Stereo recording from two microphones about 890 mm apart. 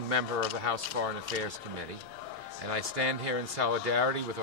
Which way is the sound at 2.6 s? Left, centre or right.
Right.